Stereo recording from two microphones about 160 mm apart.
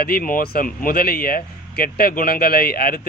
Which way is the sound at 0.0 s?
65° left (ahead or behind).